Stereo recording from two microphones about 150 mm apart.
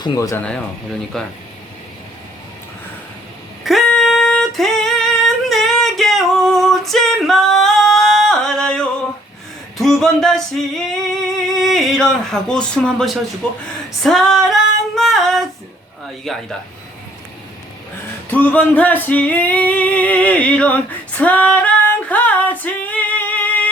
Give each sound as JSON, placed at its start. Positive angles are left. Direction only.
{"t": 0.0, "sound": "speech", "side_deg": 20}
{"t": 1.1, "sound": "speech", "side_deg": 0}
{"t": 3.6, "sound": "singing", "side_deg": 0}
{"t": 14.0, "sound": "female singing", "side_deg": 0}
{"t": 16.2, "sound": "speech", "side_deg": 0}
{"t": 18.3, "sound": "singing", "side_deg": 10}